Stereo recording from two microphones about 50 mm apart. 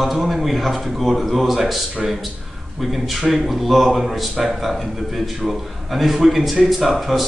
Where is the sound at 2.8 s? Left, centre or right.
Centre.